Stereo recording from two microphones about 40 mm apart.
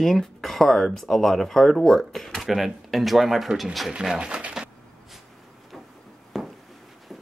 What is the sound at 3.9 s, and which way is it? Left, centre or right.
Speech, right.